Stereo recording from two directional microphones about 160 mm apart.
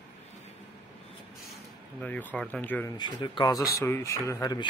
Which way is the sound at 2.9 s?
25° left (ahead or behind).